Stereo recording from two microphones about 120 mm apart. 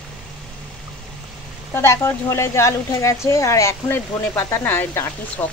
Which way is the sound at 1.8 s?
20° left (ahead or behind).